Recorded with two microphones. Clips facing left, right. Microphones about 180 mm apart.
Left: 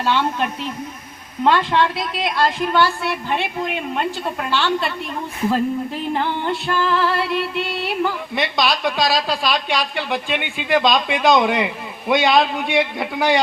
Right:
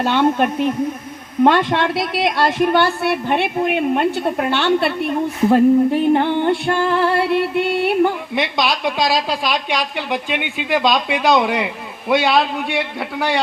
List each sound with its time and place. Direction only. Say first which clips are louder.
0.0 s a woman's voice: right 5 dB; 50° right (ahead or behind)
8.4 s a woman's voice: even; 20° right (ahead or behind); by 13.4 s 5° right (ahead or behind)